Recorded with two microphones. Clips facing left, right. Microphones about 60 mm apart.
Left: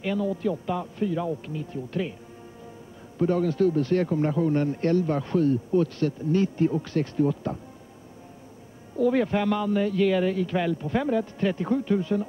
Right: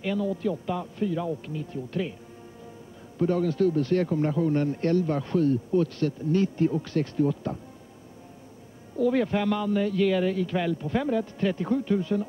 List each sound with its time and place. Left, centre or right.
0.0 s a man's voice: centre
3.2 s a man's voice: centre
8.9 s a man's voice: centre